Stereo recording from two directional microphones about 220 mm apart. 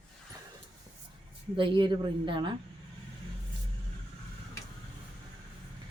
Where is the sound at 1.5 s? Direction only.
20° right (ahead or behind).